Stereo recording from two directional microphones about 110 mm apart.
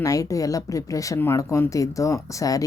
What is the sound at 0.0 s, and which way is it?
Speech, 30° left (ahead or behind).